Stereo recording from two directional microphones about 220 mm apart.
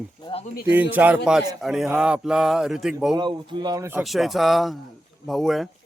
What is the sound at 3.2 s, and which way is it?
Speech, 20° right (ahead or behind).